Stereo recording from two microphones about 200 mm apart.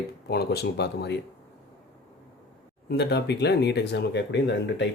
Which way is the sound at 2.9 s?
55° left (ahead or behind).